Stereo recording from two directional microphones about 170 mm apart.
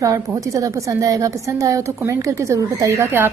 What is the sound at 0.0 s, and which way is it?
A woman's voice, 20° right (ahead or behind).